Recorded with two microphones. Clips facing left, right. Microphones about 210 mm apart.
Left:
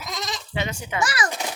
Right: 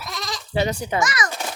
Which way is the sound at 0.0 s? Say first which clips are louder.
Even; 20° left (ahead or behind).